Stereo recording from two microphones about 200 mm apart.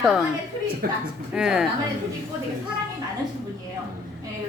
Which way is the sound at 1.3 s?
5° right (ahead or behind).